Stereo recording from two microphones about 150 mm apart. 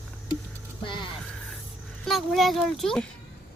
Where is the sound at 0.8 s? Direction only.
35° left (ahead or behind).